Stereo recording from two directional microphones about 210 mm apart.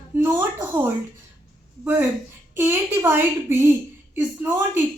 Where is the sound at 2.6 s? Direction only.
10° right (ahead or behind).